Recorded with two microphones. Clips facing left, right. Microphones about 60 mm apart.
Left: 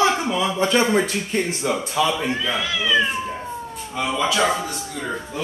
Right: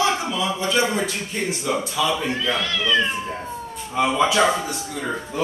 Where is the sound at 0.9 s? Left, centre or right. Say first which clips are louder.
Left 5 dB; left.